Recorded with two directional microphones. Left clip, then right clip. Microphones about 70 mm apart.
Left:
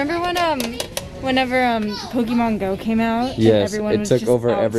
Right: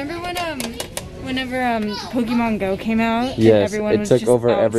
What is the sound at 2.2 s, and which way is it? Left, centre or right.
Speech, centre.